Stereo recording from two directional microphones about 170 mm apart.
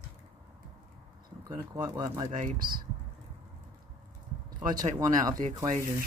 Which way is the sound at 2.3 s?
50° right (ahead or behind).